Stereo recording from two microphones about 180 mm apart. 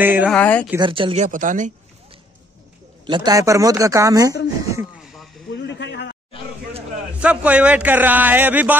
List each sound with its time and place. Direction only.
0.0 s a man's voice: 10° right (ahead or behind)
0.3 s speech: 10° left (ahead or behind)
0.7 s speech: 25° right (ahead or behind); by 1.7 s 45° right (ahead or behind)
3.1 s speech: 20° right (ahead or behind)
5.5 s a sound: 75° left (ahead or behind)
7.2 s a man's voice: 5° right (ahead or behind)